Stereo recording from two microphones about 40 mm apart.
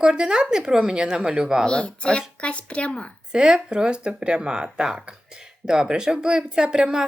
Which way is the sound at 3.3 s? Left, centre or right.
Centre.